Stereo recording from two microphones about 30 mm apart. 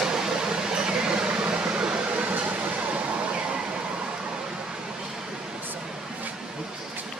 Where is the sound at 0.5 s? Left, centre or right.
Right.